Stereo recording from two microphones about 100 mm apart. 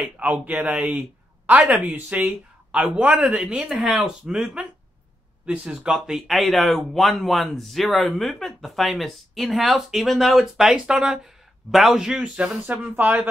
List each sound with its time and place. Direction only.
0.0 s speech: 15° right (ahead or behind)